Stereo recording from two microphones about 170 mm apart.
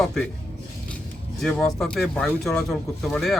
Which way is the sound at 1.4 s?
5° left (ahead or behind).